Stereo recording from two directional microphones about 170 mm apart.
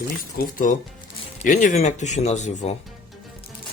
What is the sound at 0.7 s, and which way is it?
Speech, 50° left (ahead or behind).